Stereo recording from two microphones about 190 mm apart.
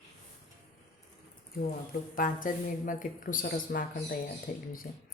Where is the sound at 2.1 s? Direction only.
45° left (ahead or behind).